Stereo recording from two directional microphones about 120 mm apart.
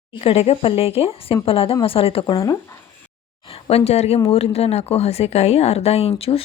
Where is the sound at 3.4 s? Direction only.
55° left (ahead or behind).